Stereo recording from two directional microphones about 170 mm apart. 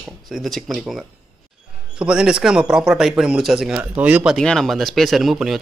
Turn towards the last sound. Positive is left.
turn(degrees=0)  # may be behind; listen again after turning